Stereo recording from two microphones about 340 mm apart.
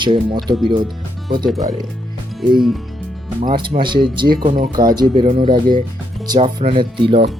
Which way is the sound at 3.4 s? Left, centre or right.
Centre.